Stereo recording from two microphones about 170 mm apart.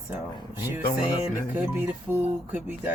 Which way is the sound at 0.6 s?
10° right (ahead or behind).